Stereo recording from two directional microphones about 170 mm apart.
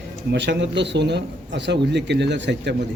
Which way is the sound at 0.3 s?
90° right.